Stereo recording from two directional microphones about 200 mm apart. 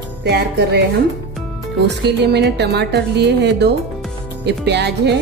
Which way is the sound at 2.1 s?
55° right (ahead or behind).